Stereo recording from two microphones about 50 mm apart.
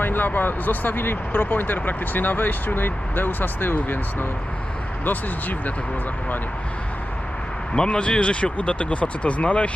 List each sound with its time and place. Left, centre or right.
0.0 s speech: left
7.7 s speech: left